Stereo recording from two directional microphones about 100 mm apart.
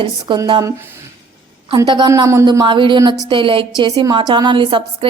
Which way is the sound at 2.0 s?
35° right (ahead or behind).